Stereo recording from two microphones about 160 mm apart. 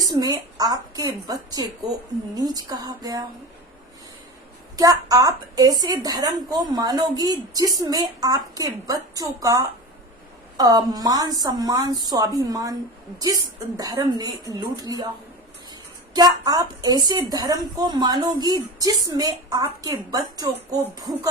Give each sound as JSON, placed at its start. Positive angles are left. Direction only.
{"t": 0.0, "sound": "a woman's voice", "side_deg": -25}
{"t": 4.8, "sound": "a woman's voice", "side_deg": -20}
{"t": 16.1, "sound": "a woman's voice", "side_deg": -25}